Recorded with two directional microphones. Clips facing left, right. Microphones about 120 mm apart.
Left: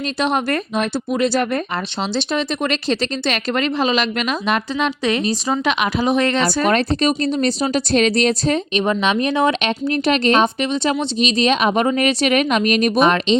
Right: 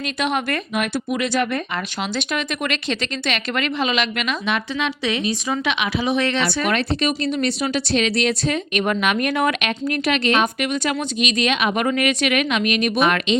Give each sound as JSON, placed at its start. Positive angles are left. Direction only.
{"t": 0.2, "sound": "speech", "side_deg": 35}
{"t": 8.7, "sound": "a woman's voice", "side_deg": 25}